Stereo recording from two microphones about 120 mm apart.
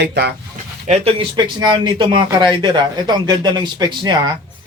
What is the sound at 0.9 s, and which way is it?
Speech, 55° right (ahead or behind).